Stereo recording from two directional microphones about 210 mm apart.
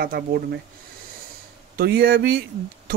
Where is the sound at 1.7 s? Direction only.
45° right (ahead or behind).